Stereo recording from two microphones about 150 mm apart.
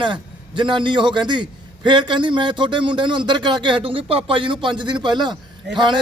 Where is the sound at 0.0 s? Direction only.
35° right (ahead or behind).